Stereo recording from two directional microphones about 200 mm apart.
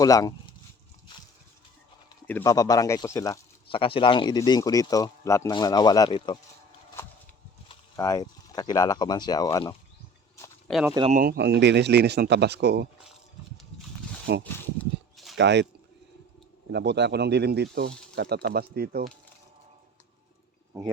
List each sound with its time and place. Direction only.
0.0 s speech: 15° left (ahead or behind)
2.2 s speech: 15° left (ahead or behind)
3.7 s speech: 25° left (ahead or behind)
7.0 s a sound: 10° left (ahead or behind)
7.7 s speech: 15° left (ahead or behind)
10.7 s speech: centre (ahead or behind)
11.1 s speech: 45° right (ahead or behind)
14.3 s speech: 55° right (ahead or behind)
15.1 s a sound: centre (ahead or behind)
15.4 s speech: 60° right (ahead or behind)
16.7 s speech: 60° right (ahead or behind)